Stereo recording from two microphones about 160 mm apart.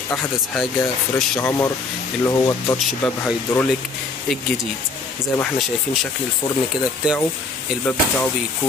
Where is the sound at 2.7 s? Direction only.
10° left (ahead or behind).